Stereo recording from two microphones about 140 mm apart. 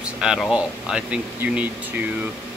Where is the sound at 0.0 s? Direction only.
5° right (ahead or behind).